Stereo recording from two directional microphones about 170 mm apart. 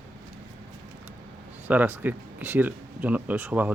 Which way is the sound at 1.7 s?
10° right (ahead or behind).